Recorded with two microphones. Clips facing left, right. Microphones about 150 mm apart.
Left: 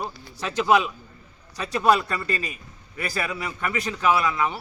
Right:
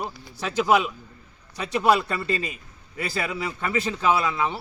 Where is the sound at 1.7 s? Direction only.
20° right (ahead or behind).